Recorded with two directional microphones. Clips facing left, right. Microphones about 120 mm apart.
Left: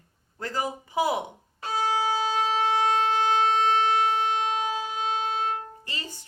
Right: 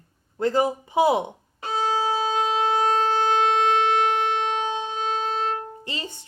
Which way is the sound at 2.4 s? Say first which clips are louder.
Right 2 dB; 40° right (ahead or behind).